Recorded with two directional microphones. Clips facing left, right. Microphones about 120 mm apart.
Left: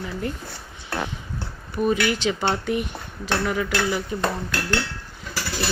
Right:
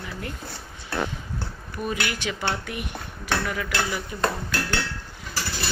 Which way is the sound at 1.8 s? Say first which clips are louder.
Left 7 dB; 30° left (ahead or behind).